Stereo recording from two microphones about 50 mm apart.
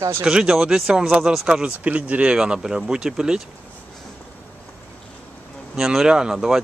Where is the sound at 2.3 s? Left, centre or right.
Centre.